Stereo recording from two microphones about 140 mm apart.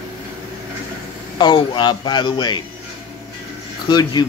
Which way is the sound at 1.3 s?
35° left (ahead or behind).